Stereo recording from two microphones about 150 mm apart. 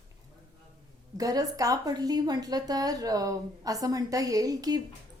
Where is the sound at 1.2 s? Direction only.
25° right (ahead or behind).